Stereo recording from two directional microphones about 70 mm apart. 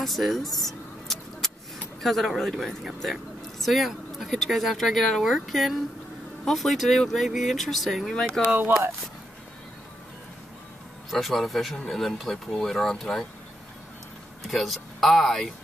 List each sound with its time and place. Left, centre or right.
0.0 s a sound: centre
2.0 s speech: centre
8.5 s speech: right
11.1 s speech: centre
14.4 s speech: centre